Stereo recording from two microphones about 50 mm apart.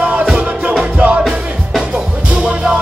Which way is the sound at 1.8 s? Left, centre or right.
Centre.